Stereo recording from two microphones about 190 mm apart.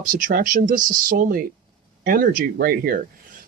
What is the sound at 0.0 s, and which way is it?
Speech, 45° right (ahead or behind).